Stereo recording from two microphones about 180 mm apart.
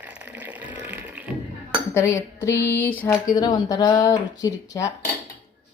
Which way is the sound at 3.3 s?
20° left (ahead or behind).